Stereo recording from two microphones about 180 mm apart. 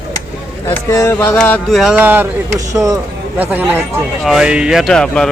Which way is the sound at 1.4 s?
5° left (ahead or behind).